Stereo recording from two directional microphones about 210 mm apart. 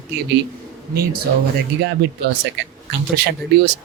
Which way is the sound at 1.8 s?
50° right (ahead or behind).